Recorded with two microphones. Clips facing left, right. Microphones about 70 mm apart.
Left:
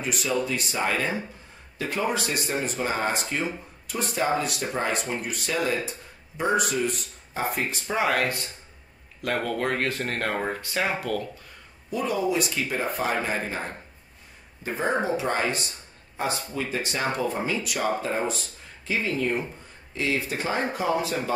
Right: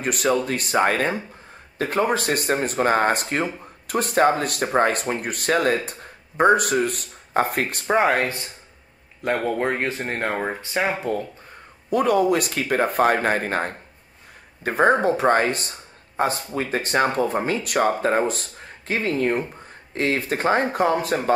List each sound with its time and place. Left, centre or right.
0.0 s speech: right
8.2 s speech: right
9.5 s speech: right
11.9 s speech: right